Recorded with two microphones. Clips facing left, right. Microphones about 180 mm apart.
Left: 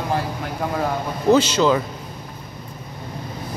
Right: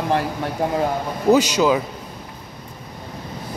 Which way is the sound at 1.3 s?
10° right (ahead or behind).